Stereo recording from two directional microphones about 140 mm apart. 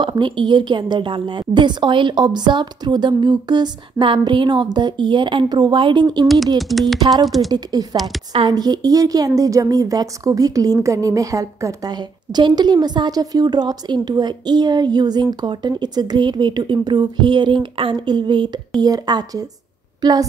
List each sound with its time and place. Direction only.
0.0 s a woman's voice: 35° right (ahead or behind)
6.2 s speech: centre (ahead or behind)
7.5 s a woman's voice: 30° right (ahead or behind)